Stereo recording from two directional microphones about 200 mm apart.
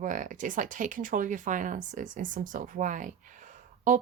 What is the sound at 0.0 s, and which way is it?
Speech, 40° right (ahead or behind).